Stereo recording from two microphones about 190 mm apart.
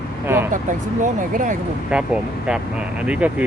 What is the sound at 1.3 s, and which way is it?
Speech, 40° right (ahead or behind).